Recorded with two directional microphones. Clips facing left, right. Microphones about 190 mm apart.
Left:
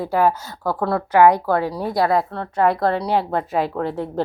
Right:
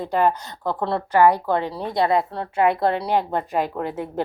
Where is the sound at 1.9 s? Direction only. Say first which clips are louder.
Even; 25° right (ahead or behind).